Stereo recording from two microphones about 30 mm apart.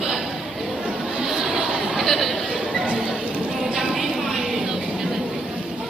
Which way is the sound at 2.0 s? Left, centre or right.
Centre.